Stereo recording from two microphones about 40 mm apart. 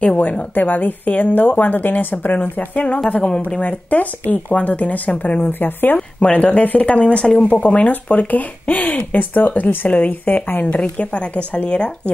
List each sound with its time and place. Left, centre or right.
0.0 s a woman's voice: left
0.6 s a woman's voice: left
3.2 s a woman's voice: left
5.4 s speech: left
5.9 s speech: left
6.3 s a woman's voice: left
10.8 s speech: left